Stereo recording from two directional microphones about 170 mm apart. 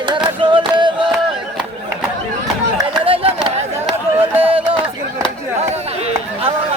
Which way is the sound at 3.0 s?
35° right (ahead or behind).